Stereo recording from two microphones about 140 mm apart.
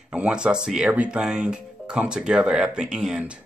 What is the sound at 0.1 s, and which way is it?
Speech, 10° right (ahead or behind).